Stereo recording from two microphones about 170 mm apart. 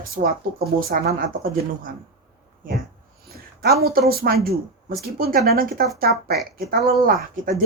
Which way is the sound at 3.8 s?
65° right (ahead or behind).